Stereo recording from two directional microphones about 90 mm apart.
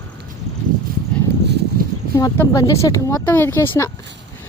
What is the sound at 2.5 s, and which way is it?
Speech, 40° left (ahead or behind).